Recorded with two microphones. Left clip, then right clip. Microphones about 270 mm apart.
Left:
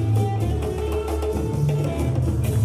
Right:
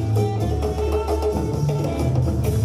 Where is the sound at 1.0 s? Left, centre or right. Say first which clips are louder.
Right 3 dB; right.